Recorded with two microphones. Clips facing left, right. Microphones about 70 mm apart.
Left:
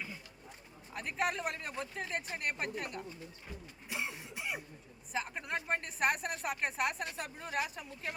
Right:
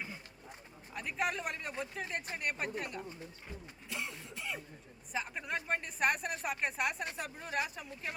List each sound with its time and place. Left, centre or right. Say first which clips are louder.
0.9 s speech: left 1 dB; centre
3.8 s cough: left 2 dB; centre
5.1 s speech: even; centre